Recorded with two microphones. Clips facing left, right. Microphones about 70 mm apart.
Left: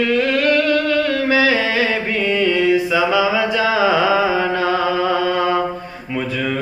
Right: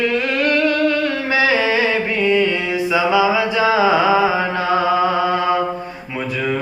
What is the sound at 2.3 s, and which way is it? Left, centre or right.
Mantra, right.